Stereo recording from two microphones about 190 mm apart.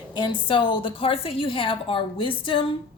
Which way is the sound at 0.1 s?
25° left (ahead or behind).